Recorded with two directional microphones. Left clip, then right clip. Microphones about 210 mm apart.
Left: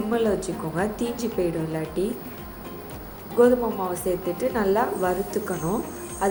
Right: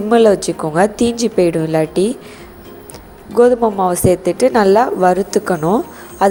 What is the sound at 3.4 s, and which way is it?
A woman's voice, 45° right (ahead or behind).